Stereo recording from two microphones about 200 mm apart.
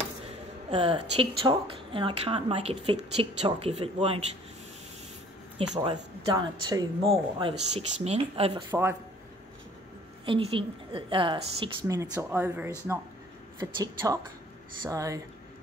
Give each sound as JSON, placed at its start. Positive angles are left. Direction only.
{"t": 0.7, "sound": "a woman's voice", "side_deg": -25}
{"t": 5.8, "sound": "a woman's voice", "side_deg": -25}
{"t": 10.2, "sound": "a woman's voice", "side_deg": -25}
{"t": 12.0, "sound": "a woman's voice", "side_deg": -15}